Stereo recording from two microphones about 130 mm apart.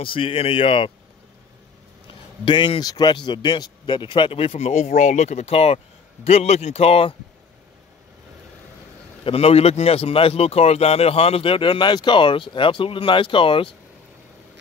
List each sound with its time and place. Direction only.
0.0 s a man's voice: 45° left (ahead or behind)
2.4 s a man's voice: 40° left (ahead or behind)
9.2 s a man's voice: 50° left (ahead or behind)